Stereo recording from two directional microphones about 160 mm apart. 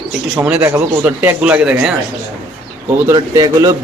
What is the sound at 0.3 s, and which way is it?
A man's voice, 10° right (ahead or behind).